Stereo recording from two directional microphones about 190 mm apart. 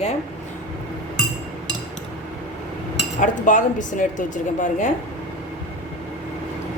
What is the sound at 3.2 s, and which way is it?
A woman's voice, 40° left (ahead or behind).